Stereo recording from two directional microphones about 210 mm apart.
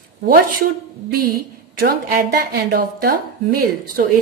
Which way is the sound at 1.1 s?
45° right (ahead or behind).